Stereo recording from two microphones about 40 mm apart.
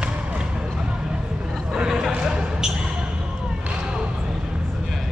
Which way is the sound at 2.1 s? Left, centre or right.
Right.